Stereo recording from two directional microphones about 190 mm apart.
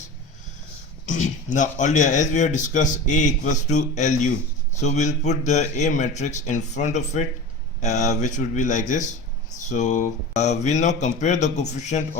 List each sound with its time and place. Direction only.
1.0 s speech: 40° left (ahead or behind)